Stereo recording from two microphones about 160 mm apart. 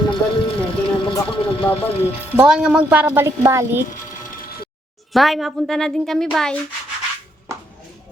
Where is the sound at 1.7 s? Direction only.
35° left (ahead or behind).